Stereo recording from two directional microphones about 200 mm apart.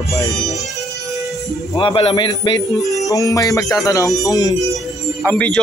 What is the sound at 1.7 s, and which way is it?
Speech, 25° left (ahead or behind).